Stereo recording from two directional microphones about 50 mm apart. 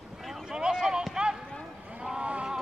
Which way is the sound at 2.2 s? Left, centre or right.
Right.